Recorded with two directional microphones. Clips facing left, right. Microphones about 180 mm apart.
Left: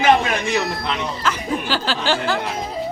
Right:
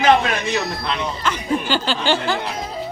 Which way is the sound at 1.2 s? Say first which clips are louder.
Right 1 dB; 5° left (ahead or behind).